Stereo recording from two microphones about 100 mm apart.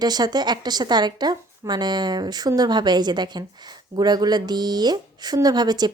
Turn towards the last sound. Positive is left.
turn(degrees=-45)  # may be behind; listen again after turning